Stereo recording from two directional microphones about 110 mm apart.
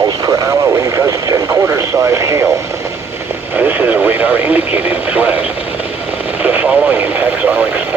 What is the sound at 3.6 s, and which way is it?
Radio, 15° right (ahead or behind).